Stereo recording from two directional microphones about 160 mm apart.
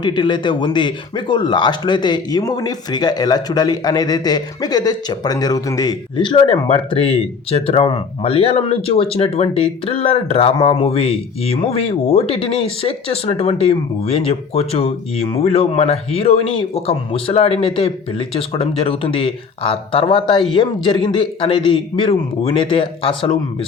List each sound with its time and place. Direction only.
0.0 s a man's voice: 30° left (ahead or behind)